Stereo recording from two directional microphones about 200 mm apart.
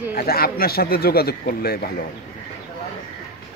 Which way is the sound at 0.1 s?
50° left (ahead or behind).